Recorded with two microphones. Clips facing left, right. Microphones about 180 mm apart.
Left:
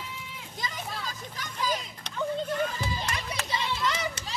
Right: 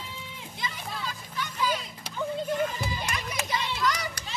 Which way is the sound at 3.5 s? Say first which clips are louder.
Right 1 dB; 25° left (ahead or behind).